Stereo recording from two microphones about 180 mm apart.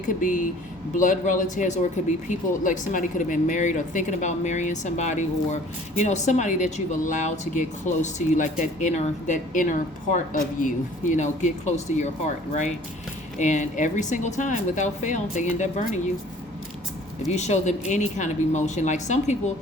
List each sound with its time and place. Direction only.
0.0 s speech: 45° left (ahead or behind)
17.2 s speech: 40° left (ahead or behind)